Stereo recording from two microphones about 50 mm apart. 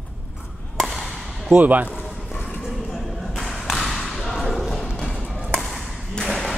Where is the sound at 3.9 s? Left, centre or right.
Centre.